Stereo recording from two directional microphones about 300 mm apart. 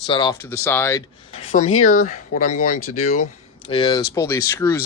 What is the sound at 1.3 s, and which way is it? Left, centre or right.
Speech, left.